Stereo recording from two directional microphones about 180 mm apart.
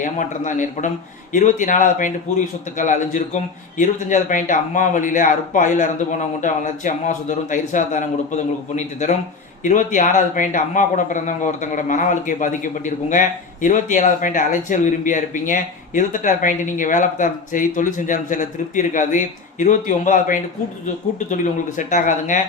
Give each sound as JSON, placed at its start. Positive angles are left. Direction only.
{"t": 0.0, "sound": "a man's voice", "side_deg": 45}